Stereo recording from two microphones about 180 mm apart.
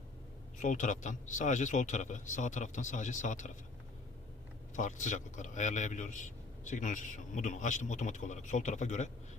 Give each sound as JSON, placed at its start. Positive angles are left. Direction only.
{"t": 0.6, "sound": "a man's voice", "side_deg": 45}
{"t": 4.7, "sound": "a man's voice", "side_deg": 45}